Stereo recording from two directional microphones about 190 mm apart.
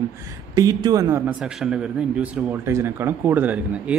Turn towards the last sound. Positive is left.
turn(degrees=-10)  # may be behind; listen again after turning